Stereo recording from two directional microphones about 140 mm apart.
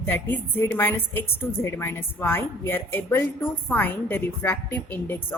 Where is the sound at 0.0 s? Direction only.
15° left (ahead or behind).